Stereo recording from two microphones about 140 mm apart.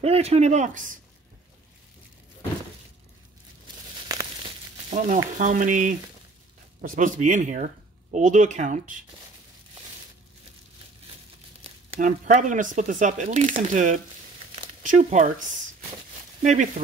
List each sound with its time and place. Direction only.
0.0 s speech: 45° right (ahead or behind); by 0.9 s 65° right (ahead or behind)
4.1 s crumpling: 25° right (ahead or behind)
4.8 s speech: 60° right (ahead or behind)
11.6 s a sound: 45° right (ahead or behind)
12.0 s speech: 60° right (ahead or behind)
16.4 s speech: 60° right (ahead or behind)